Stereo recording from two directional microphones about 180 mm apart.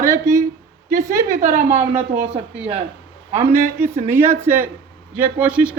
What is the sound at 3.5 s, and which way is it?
Speech, 15° right (ahead or behind).